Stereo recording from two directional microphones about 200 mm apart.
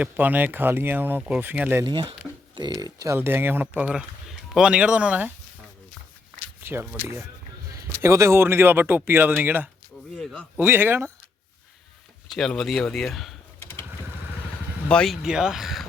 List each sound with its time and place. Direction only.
0.0 s speech: 10° right (ahead or behind)
1.8 s speech: 25° right (ahead or behind); by 5.3 s 5° right (ahead or behind)
6.6 s a sound: 10° right (ahead or behind)
8.0 s speech: 15° right (ahead or behind)
10.2 s a man's voice: 5° left (ahead or behind)
10.6 s speech: 10° right (ahead or behind)
12.3 s speech: centre (ahead or behind)
13.6 s typing: 10° left (ahead or behind)
14.8 s speech: 5° left (ahead or behind)